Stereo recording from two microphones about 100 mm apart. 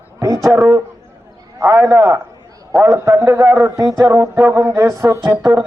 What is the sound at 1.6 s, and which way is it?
A man's voice, 25° right (ahead or behind).